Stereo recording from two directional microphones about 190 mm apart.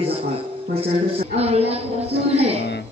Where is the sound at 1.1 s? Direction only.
30° right (ahead or behind).